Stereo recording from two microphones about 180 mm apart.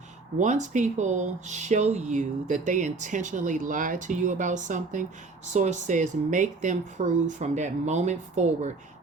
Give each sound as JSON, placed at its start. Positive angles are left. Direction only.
{"t": 0.3, "sound": "speech", "side_deg": -40}